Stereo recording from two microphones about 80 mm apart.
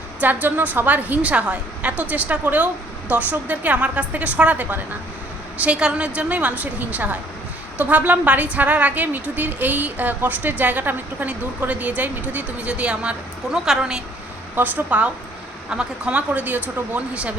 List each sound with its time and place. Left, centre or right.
0.2 s a woman's voice: right
14.5 s a woman's voice: right